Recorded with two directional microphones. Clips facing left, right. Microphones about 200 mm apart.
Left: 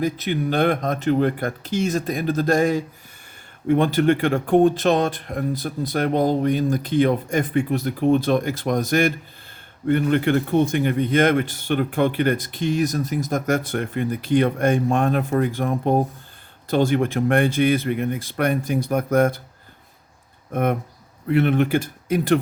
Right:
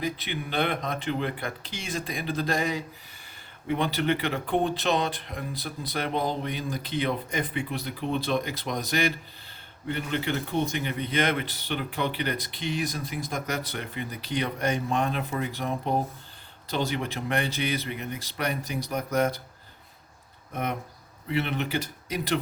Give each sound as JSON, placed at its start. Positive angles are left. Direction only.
{"t": 0.0, "sound": "speech", "side_deg": 45}
{"t": 20.5, "sound": "speech", "side_deg": 50}